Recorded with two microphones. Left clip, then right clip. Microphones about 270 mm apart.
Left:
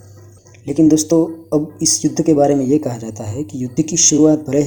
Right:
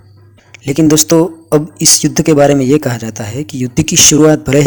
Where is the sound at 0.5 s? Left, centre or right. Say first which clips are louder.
Right 3 dB; right.